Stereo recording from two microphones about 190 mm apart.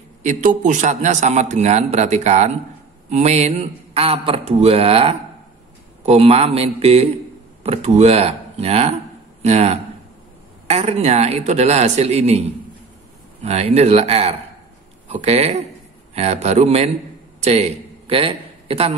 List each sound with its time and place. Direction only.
0.2 s a man's voice: 40° right (ahead or behind)